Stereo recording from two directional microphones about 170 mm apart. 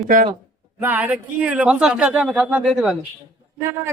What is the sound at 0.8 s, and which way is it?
Speech, 10° right (ahead or behind).